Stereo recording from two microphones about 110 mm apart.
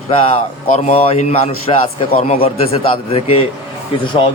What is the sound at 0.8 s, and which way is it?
A man's voice, 65° left (ahead or behind).